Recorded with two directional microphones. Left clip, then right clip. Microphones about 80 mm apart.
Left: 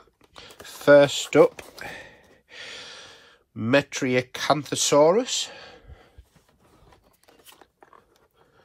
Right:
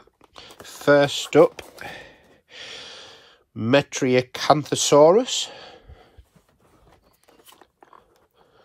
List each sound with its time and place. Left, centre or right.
0.6 s speech: centre
1.4 s sigh: right
3.5 s speech: right